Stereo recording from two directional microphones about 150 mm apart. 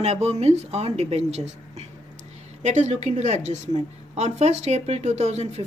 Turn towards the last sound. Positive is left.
turn(degrees=-50)  # may be behind; listen again after turning